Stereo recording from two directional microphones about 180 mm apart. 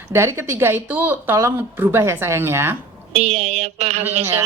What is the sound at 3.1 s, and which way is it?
Speech, 35° right (ahead or behind).